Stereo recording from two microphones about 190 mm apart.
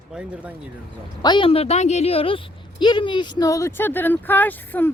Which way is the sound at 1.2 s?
25° left (ahead or behind).